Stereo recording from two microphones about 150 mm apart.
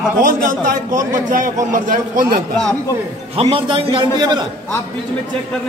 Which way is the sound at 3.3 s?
40° right (ahead or behind).